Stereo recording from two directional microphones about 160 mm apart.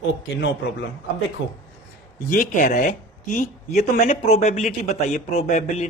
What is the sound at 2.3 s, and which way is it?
Speech, 55° left (ahead or behind).